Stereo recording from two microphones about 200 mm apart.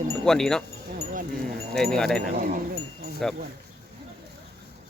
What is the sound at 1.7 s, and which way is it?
Speech, centre (ahead or behind).